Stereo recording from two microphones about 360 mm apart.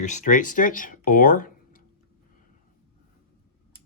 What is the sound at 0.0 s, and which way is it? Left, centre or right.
Speech, centre.